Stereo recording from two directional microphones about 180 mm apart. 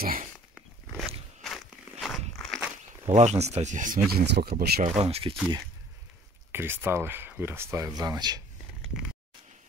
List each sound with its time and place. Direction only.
0.0 s dog: 50° right (ahead or behind)
0.9 s walk: centre (ahead or behind)
3.1 s speech: 40° right (ahead or behind)
4.1 s speech: 65° right (ahead or behind)
4.8 s speech: 35° right (ahead or behind)
6.5 s speech: 10° right (ahead or behind)